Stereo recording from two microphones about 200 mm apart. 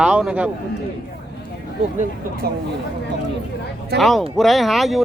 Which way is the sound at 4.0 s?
Centre (ahead or behind).